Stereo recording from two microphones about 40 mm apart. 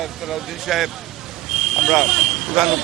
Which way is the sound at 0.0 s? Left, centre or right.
Centre.